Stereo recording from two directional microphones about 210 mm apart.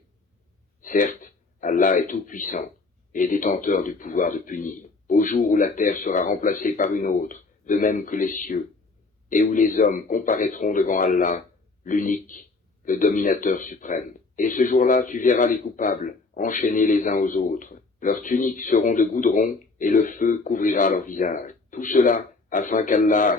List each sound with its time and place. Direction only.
0.8 s a man's voice: 40° left (ahead or behind)